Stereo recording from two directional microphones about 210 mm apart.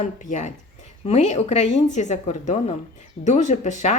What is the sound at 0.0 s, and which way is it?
Speech, 35° left (ahead or behind).